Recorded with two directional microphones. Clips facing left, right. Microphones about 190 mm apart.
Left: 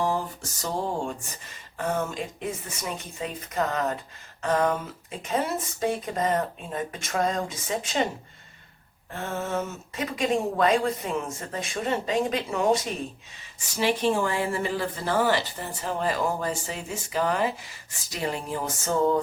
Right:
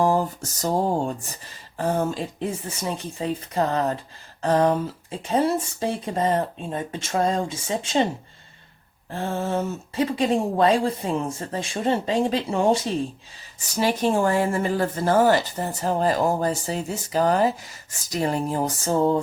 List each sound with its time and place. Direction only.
0.0 s a sound: 45° right (ahead or behind)
1.8 s a woman's voice: 30° right (ahead or behind)
9.0 s a woman's voice: 30° right (ahead or behind)
13.6 s a woman's voice: 40° right (ahead or behind)